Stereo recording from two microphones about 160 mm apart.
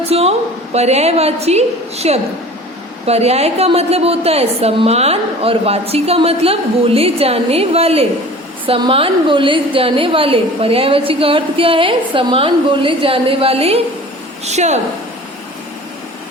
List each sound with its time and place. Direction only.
0.1 s a woman's voice: 40° right (ahead or behind)